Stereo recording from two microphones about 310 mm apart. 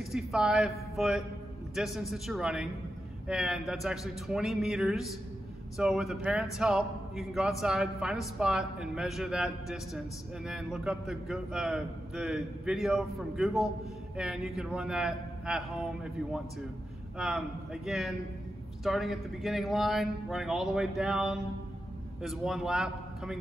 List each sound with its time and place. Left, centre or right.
0.1 s a man's voice: centre
17.8 s a man's voice: centre